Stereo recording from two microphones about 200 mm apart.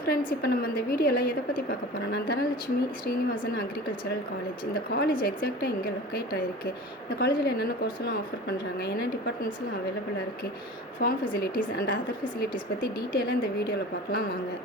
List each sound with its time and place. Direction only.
0.0 s a woman's voice: 45° left (ahead or behind)
4.7 s a woman's voice: 50° left (ahead or behind)
11.0 s a woman's voice: 50° left (ahead or behind)
13.1 s a woman's voice: 50° left (ahead or behind)